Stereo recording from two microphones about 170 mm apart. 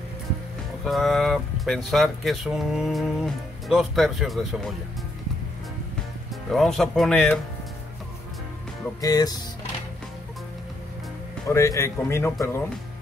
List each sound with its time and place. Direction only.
0.8 s speech: centre (ahead or behind)
6.5 s speech: centre (ahead or behind)
9.0 s speech: 25° left (ahead or behind)
11.4 s speech: 15° left (ahead or behind)